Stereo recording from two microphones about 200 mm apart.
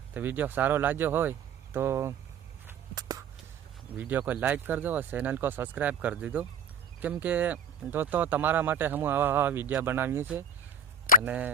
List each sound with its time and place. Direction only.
0.1 s speech: 10° right (ahead or behind)
2.6 s walk: 20° right (ahead or behind)
3.9 s speech: 10° right (ahead or behind)